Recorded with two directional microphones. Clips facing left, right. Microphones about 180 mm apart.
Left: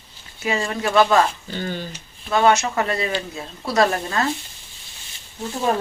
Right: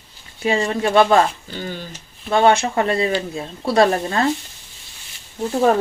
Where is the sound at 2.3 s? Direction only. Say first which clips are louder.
Right 2 dB; 30° right (ahead or behind).